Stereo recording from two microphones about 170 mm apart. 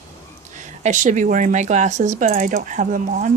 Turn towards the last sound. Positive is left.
turn(degrees=-45)  # may be behind; listen again after turning